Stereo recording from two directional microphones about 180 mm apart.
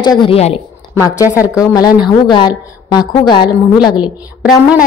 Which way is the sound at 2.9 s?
25° left (ahead or behind).